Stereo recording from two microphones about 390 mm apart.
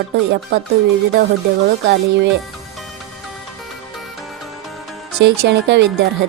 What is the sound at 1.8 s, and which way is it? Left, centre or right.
Speech, right.